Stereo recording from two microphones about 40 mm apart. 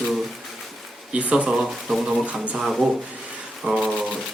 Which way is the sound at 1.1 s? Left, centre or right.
Right.